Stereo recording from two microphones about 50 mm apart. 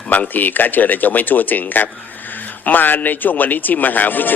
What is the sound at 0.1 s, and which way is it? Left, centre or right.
A man's voice, left.